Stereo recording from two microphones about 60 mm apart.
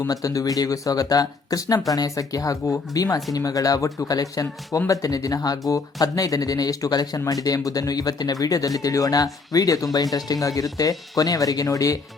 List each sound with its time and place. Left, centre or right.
0.1 s speech: left
4.9 s speech: left
10.4 s speech: left